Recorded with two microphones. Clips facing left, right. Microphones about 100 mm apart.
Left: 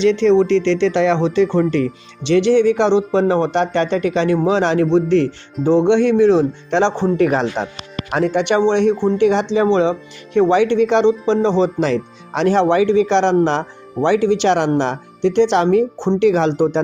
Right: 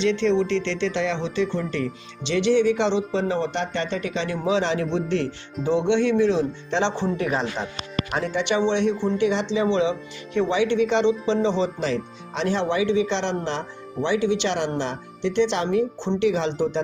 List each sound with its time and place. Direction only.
0.0 s speech: 70° left (ahead or behind); by 7.1 s 50° left (ahead or behind)
7.3 s speech: 40° left (ahead or behind)
8.1 s speech: 55° left (ahead or behind)